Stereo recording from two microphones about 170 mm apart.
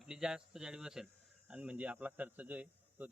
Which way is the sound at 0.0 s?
5° right (ahead or behind).